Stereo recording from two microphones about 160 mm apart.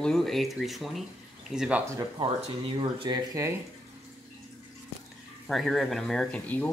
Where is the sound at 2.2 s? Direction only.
35° right (ahead or behind).